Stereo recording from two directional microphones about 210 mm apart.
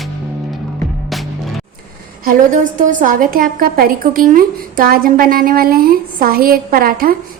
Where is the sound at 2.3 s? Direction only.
40° right (ahead or behind).